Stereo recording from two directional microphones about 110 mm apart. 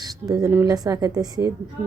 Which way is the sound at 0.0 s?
35° right (ahead or behind).